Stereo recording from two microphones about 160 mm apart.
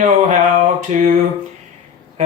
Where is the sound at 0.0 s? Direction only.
55° right (ahead or behind).